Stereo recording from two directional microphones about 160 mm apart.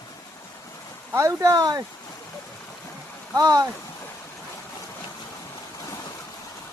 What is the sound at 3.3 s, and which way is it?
Speech, 25° right (ahead or behind).